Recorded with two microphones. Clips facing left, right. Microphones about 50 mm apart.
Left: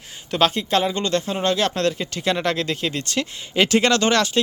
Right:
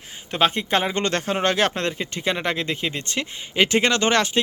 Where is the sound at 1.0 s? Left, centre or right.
Right.